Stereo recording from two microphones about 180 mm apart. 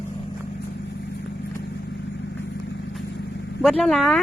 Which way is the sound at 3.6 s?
Centre (ahead or behind).